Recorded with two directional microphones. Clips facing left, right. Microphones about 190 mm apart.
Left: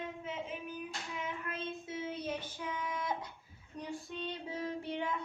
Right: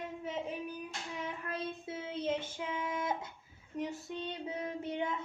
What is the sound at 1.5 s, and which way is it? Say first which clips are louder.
Child singing: right 1 dB; 30° right (ahead or behind).